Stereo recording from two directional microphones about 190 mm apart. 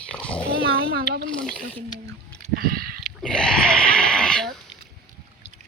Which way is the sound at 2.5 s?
50° right (ahead or behind).